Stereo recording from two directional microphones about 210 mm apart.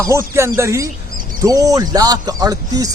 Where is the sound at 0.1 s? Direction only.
15° right (ahead or behind).